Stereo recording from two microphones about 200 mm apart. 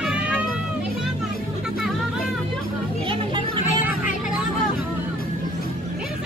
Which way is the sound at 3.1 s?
25° right (ahead or behind).